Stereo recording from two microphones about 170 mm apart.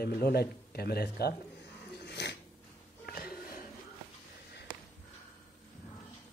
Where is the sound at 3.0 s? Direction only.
65° left (ahead or behind).